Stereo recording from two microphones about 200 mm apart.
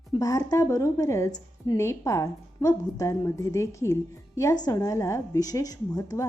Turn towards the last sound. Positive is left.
turn(degrees=15)  # may be behind; listen again after turning